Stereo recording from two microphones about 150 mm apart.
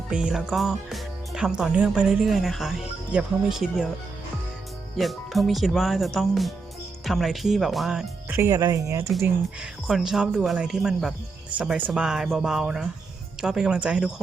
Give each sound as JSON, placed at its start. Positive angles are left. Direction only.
{"t": 0.1, "sound": "speech", "side_deg": -5}
{"t": 4.9, "sound": "speech", "side_deg": 0}
{"t": 8.4, "sound": "speech", "side_deg": -20}
{"t": 9.8, "sound": "speech", "side_deg": 0}